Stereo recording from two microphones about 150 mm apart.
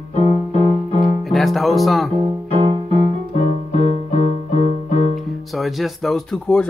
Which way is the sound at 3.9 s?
45° left (ahead or behind).